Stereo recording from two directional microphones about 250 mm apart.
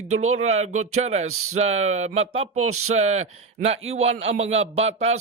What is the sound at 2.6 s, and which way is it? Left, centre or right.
Speech, right.